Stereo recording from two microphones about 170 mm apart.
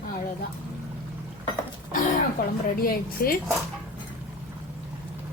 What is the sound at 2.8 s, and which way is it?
Speech, 60° left (ahead or behind).